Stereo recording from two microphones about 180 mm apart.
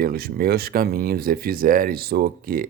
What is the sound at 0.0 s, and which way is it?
Speech, 60° right (ahead or behind).